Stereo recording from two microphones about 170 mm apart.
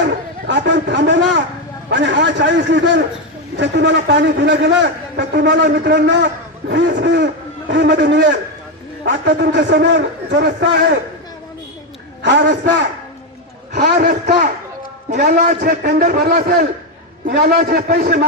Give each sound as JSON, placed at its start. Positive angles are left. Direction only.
{"t": 0.0, "sound": "a sound", "side_deg": -90}
{"t": 1.9, "sound": "a man's voice", "side_deg": -90}
{"t": 12.2, "sound": "a man's voice", "side_deg": -90}
{"t": 14.0, "sound": "a man's voice", "side_deg": -45}
{"t": 15.4, "sound": "a man's voice", "side_deg": -70}
{"t": 17.2, "sound": "a man's voice", "side_deg": -65}